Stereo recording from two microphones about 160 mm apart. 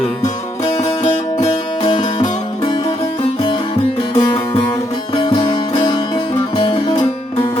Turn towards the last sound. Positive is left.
turn(degrees=30)  # may be behind; listen again after turning